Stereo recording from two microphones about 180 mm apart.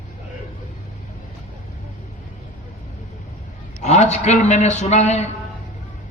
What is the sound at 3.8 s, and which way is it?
A man's voice, 40° left (ahead or behind).